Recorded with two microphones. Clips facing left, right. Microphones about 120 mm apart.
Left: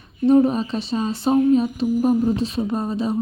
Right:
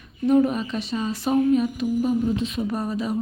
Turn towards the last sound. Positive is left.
turn(degrees=25)  # may be behind; listen again after turning